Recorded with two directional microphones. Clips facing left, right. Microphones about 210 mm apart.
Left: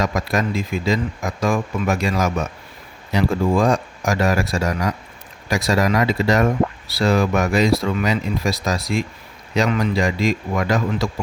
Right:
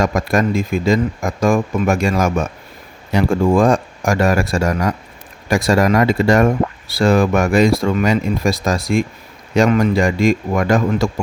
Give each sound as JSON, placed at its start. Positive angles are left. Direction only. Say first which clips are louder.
{"t": 0.0, "sound": "speech", "louder": "right 5 dB", "side_deg": -50}